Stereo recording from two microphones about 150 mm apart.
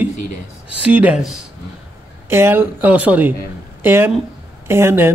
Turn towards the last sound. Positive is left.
turn(degrees=-15)  # may be behind; listen again after turning